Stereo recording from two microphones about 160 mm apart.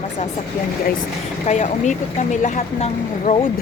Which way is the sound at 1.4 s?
45° left (ahead or behind).